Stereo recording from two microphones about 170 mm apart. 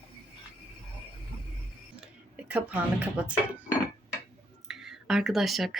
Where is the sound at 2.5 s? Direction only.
10° right (ahead or behind).